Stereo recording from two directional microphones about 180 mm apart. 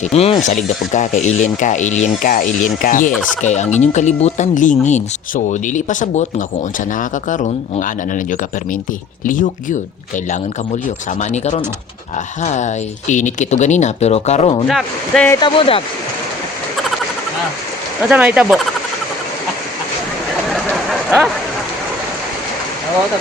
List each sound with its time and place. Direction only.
0.0 s speech: 35° left (ahead or behind)
11.2 s speech: 40° left (ahead or behind)
14.7 s speech: centre (ahead or behind)
15.4 s speech: 30° left (ahead or behind)
18.1 s speech: 10° right (ahead or behind)
20.5 s a sound: centre (ahead or behind)